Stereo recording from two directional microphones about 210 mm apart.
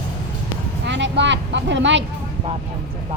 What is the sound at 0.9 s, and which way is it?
Vehicle, 60° right (ahead or behind).